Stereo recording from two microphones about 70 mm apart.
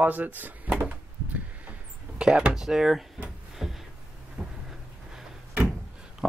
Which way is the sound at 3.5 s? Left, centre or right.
Centre.